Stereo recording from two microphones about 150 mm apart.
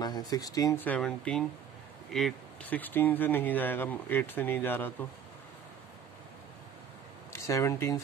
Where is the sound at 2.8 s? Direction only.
15° left (ahead or behind).